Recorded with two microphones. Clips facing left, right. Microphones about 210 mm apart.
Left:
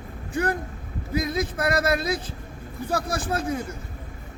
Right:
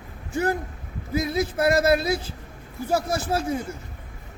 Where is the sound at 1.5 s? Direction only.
25° right (ahead or behind).